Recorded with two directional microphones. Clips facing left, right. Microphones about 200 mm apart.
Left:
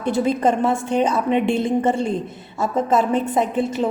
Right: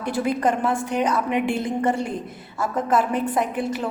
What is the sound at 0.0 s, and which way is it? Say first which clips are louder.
A woman's voice: left 4 dB; 25° left (ahead or behind).